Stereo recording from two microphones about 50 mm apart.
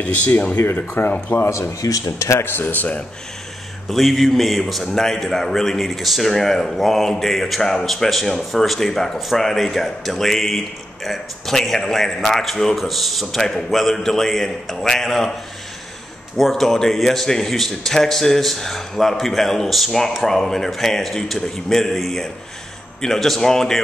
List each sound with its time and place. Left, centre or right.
0.0 s speech: left
0.6 s speech: left
1.4 s speech: left
2.4 s speech: left
3.9 s speech: centre
16.3 s speech: centre